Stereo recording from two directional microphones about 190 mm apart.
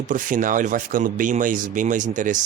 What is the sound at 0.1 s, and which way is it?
Speech, 45° right (ahead or behind).